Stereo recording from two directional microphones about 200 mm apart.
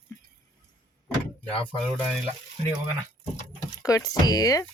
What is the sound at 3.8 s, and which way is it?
Speech, 15° left (ahead or behind).